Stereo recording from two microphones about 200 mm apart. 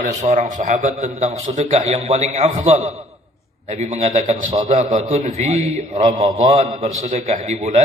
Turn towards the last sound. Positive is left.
turn(degrees=-35)  # may be behind; listen again after turning